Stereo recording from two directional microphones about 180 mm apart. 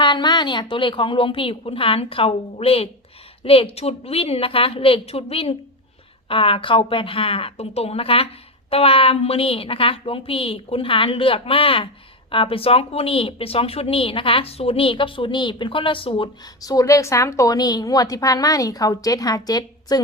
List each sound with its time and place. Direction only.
0.0 s a woman's voice: 25° left (ahead or behind)